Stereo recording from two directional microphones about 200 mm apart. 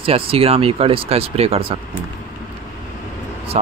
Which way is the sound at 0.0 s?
30° right (ahead or behind).